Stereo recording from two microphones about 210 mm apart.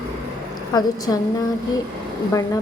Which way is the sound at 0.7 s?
15° left (ahead or behind).